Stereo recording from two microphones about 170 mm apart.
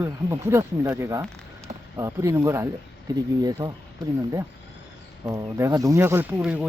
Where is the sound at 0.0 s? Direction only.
20° right (ahead or behind).